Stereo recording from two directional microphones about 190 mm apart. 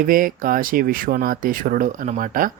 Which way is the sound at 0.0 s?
45° right (ahead or behind).